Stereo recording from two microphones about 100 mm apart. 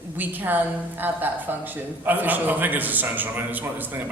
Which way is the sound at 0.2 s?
20° right (ahead or behind).